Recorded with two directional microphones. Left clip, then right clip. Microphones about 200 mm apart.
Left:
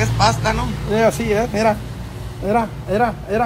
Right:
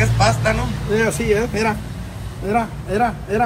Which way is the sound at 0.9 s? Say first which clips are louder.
Left 2 dB; 50° left (ahead or behind).